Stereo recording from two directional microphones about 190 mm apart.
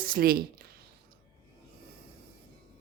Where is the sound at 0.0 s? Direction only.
50° right (ahead or behind).